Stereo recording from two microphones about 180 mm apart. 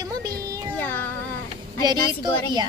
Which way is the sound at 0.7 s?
10° left (ahead or behind).